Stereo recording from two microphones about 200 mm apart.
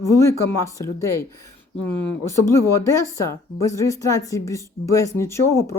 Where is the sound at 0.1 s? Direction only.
15° left (ahead or behind).